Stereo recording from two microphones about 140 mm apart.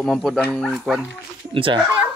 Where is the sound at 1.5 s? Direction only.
35° right (ahead or behind).